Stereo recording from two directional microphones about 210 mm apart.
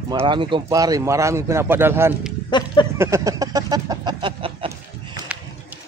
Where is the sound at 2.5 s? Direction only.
20° left (ahead or behind).